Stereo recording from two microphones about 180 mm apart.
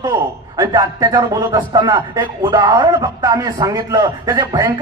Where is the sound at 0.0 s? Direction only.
20° right (ahead or behind).